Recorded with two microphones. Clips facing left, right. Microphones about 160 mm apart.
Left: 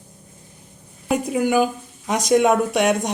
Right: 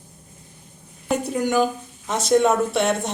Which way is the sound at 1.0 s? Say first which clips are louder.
Left 2 dB; 10° left (ahead or behind).